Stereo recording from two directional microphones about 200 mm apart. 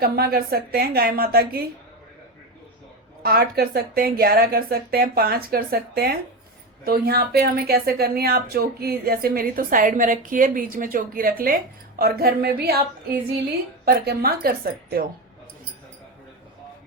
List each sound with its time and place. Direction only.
0.0 s speech: 50° right (ahead or behind)
3.2 s speech: 50° right (ahead or behind)
13.8 s speech: 50° right (ahead or behind)